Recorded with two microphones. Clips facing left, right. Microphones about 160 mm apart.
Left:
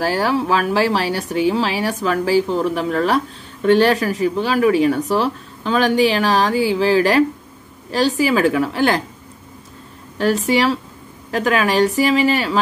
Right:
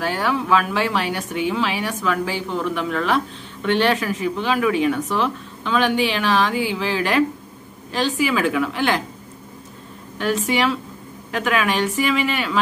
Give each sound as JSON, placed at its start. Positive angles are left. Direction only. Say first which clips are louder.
{"t": 0.0, "sound": "speech", "louder": "left 4 dB", "side_deg": 35}
{"t": 10.1, "sound": "speech", "louder": "left 4 dB", "side_deg": 35}